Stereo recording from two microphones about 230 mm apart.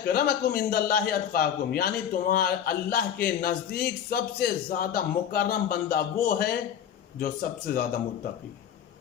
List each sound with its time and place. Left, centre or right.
0.0 s a man's voice: left